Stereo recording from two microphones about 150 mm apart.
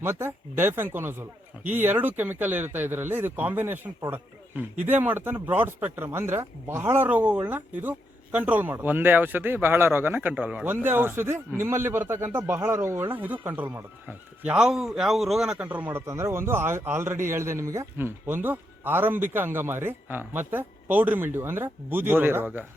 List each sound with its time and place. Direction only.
0.0 s speech: 15° right (ahead or behind)